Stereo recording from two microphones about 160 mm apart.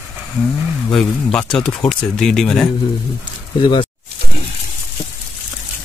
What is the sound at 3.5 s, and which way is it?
Speech, 30° left (ahead or behind).